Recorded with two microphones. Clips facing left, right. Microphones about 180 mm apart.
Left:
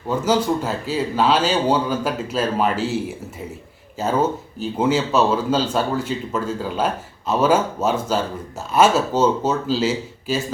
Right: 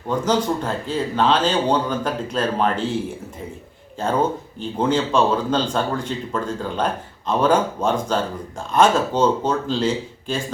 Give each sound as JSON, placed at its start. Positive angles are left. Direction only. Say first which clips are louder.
{"t": 0.1, "sound": "a man's voice", "louder": "left 1 dB", "side_deg": 5}